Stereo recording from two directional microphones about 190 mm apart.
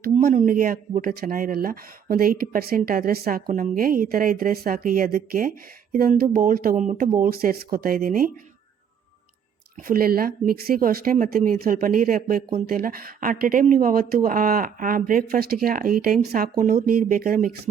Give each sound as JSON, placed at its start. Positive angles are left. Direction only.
{"t": 0.0, "sound": "a sound", "side_deg": -50}
{"t": 0.3, "sound": "speech", "side_deg": -45}
{"t": 9.8, "sound": "speech", "side_deg": -50}